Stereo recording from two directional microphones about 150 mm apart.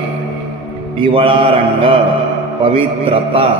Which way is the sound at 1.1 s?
35° right (ahead or behind).